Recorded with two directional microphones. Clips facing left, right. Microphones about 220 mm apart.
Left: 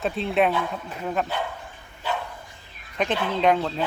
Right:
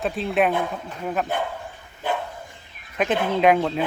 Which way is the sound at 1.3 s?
55° right (ahead or behind).